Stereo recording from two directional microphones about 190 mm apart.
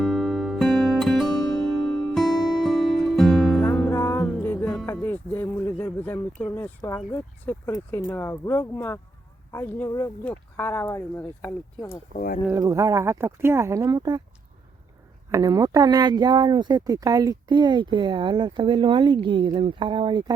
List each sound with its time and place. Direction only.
0.0 s music: centre (ahead or behind)
1.4 s music: 20° left (ahead or behind)
1.6 s music: centre (ahead or behind)
3.8 s music: 15° left (ahead or behind)
6.6 s speech: 15° left (ahead or behind)
12.1 s speech: 45° left (ahead or behind)
12.5 s speech: 15° right (ahead or behind)
15.3 s speech: 20° right (ahead or behind)